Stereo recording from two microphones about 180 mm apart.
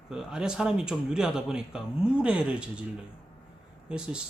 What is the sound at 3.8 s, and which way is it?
Speech, 5° right (ahead or behind).